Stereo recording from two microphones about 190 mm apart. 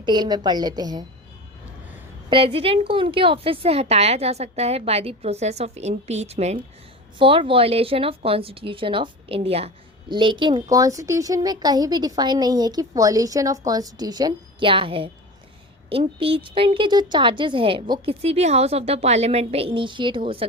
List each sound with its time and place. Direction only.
0.0 s speech: 20° right (ahead or behind)
2.3 s a woman's voice: 30° right (ahead or behind)